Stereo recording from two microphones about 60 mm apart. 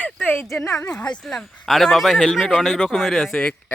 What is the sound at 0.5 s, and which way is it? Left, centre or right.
Speech, left.